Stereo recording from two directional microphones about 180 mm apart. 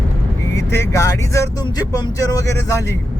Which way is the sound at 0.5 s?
15° left (ahead or behind).